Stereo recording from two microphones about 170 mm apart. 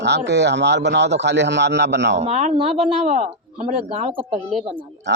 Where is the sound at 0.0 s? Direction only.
90° right.